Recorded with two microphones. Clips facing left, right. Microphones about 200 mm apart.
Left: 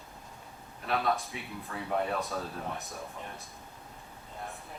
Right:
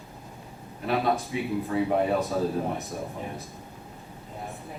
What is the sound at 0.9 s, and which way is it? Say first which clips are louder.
Speech: right 5 dB; centre (ahead or behind).